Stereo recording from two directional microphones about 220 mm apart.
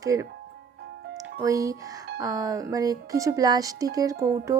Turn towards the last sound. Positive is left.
turn(degrees=-15)  # may be behind; listen again after turning